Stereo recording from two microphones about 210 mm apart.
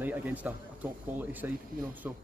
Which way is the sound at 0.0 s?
10° right (ahead or behind).